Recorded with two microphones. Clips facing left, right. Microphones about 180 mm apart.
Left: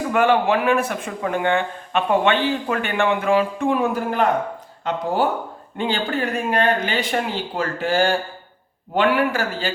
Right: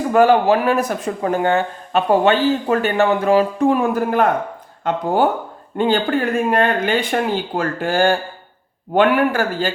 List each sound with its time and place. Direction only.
0.1 s speech: 35° right (ahead or behind)